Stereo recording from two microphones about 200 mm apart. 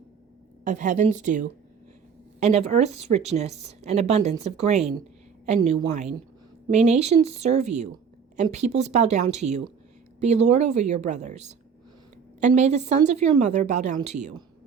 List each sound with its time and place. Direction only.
0.6 s a woman's voice: 40° right (ahead or behind)